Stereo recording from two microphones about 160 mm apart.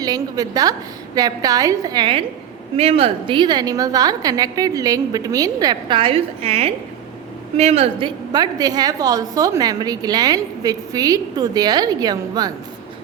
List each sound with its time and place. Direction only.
0.0 s a woman's voice: 25° right (ahead or behind)